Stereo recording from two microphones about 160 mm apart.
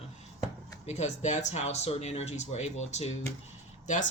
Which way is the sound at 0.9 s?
45° left (ahead or behind).